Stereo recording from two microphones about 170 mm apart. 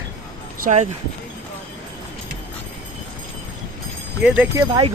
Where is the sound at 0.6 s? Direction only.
45° right (ahead or behind).